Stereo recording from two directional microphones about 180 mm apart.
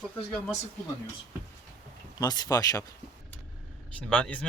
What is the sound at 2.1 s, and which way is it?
Speech, 20° left (ahead or behind).